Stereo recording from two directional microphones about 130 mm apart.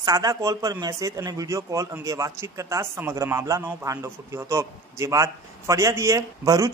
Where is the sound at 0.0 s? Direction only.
30° right (ahead or behind).